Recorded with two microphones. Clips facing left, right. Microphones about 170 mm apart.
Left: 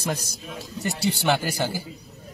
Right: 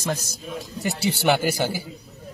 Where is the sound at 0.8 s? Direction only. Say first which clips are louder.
Right 1 dB; 5° right (ahead or behind).